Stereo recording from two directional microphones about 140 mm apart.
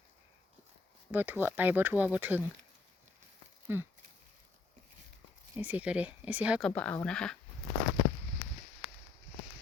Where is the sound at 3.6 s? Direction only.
15° right (ahead or behind).